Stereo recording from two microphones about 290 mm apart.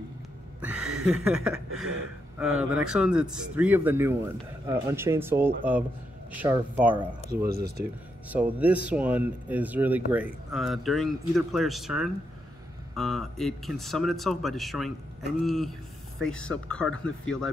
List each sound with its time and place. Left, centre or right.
0.6 s a sound: centre
2.3 s speech: centre
7.4 s speech: right
8.3 s speech: centre